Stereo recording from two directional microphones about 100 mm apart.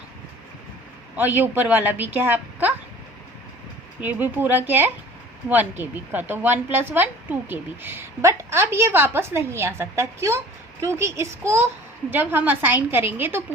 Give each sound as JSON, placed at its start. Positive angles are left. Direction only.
{"t": 1.1, "sound": "speech", "side_deg": -20}
{"t": 4.0, "sound": "speech", "side_deg": -20}